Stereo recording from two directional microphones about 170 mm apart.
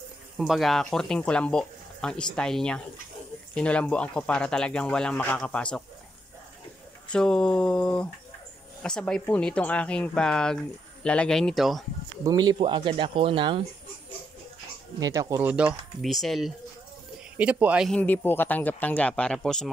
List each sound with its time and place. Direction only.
0.4 s speech: centre (ahead or behind)
7.1 s speech: 5° left (ahead or behind)
12.3 s speech: 25° right (ahead or behind)
15.0 s speech: 20° right (ahead or behind)
17.8 s speech: 10° left (ahead or behind)